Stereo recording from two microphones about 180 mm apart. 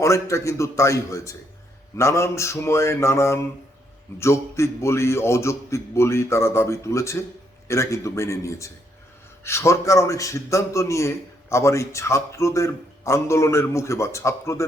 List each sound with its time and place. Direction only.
0.0 s a man's voice: 15° left (ahead or behind)